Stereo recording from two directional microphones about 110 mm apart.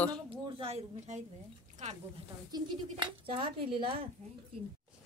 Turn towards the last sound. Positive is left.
turn(degrees=-55)  # may be behind; listen again after turning